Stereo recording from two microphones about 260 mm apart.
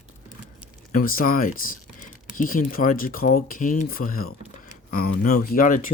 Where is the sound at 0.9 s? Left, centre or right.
Left.